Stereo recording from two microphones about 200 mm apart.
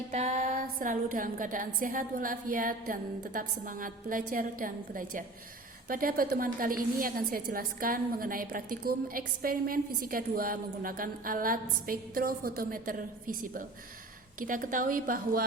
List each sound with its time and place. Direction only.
0.1 s a woman's voice: 35° right (ahead or behind)